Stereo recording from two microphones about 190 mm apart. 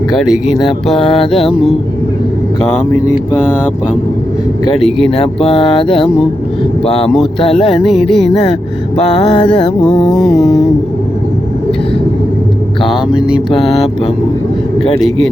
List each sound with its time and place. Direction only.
0.1 s music: centre (ahead or behind)
0.9 s speech: 25° left (ahead or behind)
5.0 s speech: 30° left (ahead or behind)
7.9 s music: centre (ahead or behind)
9.8 s music: 5° left (ahead or behind)
13.1 s music: 5° right (ahead or behind)